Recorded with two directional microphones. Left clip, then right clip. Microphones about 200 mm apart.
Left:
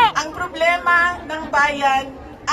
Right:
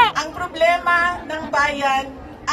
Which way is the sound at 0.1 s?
25° left (ahead or behind).